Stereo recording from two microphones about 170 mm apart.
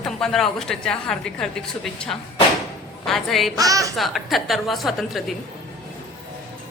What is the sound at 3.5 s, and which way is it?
Speech, 20° right (ahead or behind).